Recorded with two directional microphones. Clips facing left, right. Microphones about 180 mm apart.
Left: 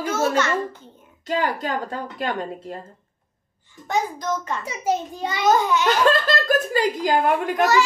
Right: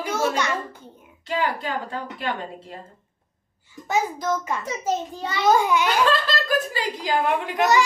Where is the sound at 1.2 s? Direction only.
45° left (ahead or behind).